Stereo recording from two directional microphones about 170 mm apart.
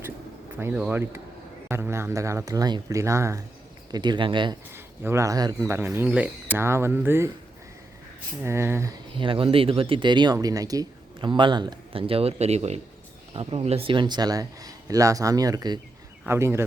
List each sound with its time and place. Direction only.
0.6 s speech: 10° right (ahead or behind); by 4.5 s 30° right (ahead or behind)
4.7 s speech: 15° right (ahead or behind)
8.4 s speech: 15° right (ahead or behind)
9.1 s speech: 30° right (ahead or behind); by 16.6 s 15° right (ahead or behind)